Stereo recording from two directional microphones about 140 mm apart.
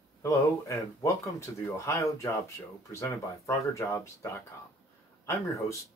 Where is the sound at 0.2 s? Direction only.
20° left (ahead or behind).